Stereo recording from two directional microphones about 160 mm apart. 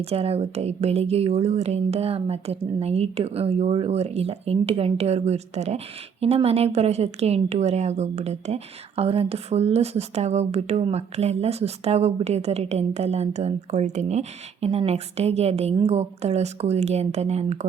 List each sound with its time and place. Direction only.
0.0 s a woman's voice: 40° right (ahead or behind)